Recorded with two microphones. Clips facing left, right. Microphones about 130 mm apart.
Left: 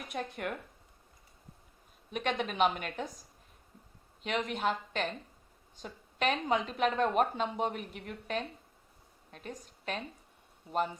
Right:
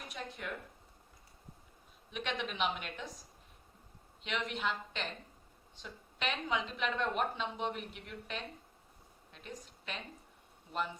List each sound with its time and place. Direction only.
0.1 s speech: 55° left (ahead or behind)
2.0 s a woman's voice: 45° left (ahead or behind)
4.2 s a woman's voice: 45° left (ahead or behind)